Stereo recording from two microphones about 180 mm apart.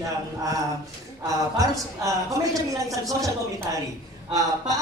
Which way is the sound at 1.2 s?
20° right (ahead or behind).